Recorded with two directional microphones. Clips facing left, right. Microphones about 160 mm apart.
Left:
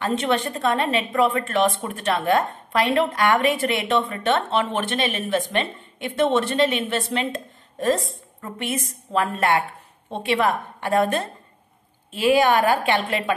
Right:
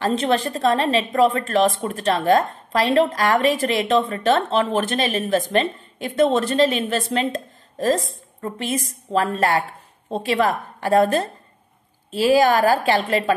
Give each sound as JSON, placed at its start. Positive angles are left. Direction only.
{"t": 0.0, "sound": "speech", "side_deg": -35}